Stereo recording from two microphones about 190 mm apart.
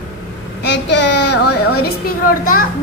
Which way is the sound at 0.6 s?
65° left (ahead or behind).